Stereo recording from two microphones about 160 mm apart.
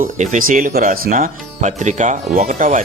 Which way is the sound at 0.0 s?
50° right (ahead or behind).